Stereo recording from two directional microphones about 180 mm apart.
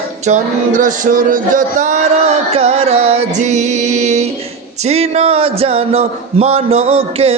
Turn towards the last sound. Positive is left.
turn(degrees=-35)  # may be behind; listen again after turning